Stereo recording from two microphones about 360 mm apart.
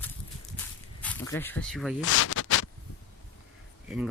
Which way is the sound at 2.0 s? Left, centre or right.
Left.